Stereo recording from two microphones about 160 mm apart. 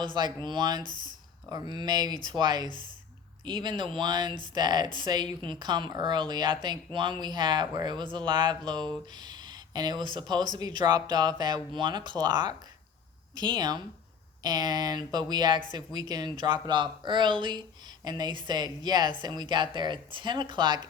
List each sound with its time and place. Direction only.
0.0 s speech: 30° right (ahead or behind)